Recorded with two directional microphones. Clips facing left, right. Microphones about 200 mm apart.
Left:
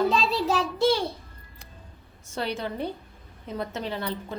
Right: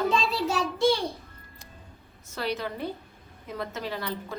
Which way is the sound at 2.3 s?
30° left (ahead or behind).